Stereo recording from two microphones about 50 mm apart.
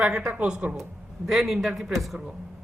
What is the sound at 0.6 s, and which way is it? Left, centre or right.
Speech, right.